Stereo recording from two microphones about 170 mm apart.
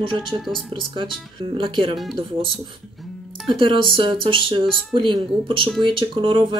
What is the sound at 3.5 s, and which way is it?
Speech, 30° right (ahead or behind).